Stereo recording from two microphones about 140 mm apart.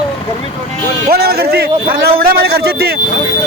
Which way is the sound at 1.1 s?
90° right.